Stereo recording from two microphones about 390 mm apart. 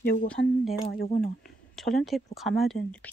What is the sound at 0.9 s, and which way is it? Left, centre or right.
Speech, left.